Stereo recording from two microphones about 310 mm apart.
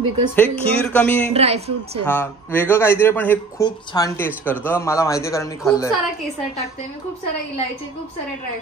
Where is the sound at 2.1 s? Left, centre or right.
Centre.